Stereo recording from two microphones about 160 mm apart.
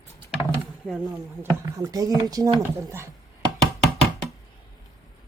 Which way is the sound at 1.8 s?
25° right (ahead or behind).